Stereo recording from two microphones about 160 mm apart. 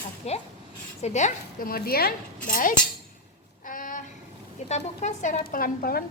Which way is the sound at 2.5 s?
60° left (ahead or behind).